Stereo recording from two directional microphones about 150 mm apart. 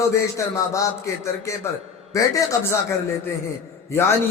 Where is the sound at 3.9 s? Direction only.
15° left (ahead or behind).